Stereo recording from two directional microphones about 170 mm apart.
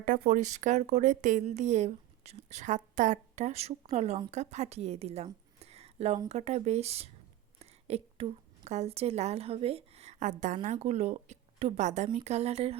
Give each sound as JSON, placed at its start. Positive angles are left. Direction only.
{"t": 0.0, "sound": "a woman's voice", "side_deg": -55}